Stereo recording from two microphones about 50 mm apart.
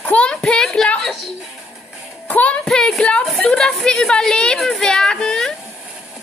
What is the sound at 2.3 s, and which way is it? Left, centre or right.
Speech, left.